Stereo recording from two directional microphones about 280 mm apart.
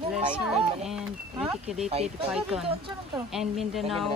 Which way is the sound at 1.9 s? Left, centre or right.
Right.